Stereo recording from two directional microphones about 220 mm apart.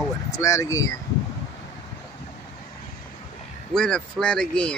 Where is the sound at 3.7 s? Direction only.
5° left (ahead or behind).